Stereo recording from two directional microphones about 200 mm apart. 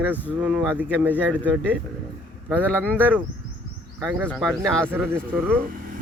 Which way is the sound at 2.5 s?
10° right (ahead or behind).